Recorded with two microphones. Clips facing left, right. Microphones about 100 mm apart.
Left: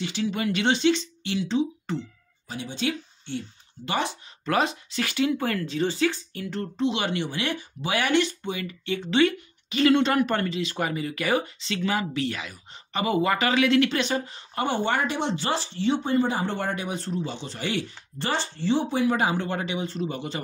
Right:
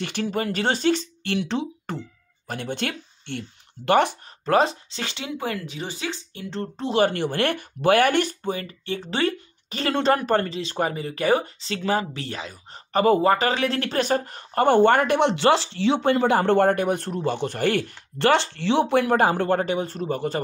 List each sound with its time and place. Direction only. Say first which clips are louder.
0.0 s speech: right 1 dB; 55° right (ahead or behind)
4.5 s speech: right 5 dB; 35° right (ahead or behind)